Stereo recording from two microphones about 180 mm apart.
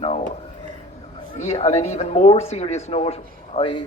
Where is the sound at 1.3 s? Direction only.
40° left (ahead or behind).